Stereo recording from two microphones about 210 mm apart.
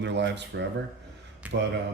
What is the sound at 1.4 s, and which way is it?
Speech, 5° right (ahead or behind).